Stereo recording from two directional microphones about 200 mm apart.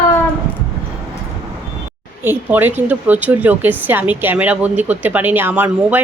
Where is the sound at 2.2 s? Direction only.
10° right (ahead or behind).